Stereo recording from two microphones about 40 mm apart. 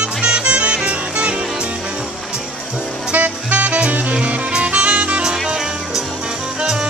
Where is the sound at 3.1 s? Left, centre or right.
Right.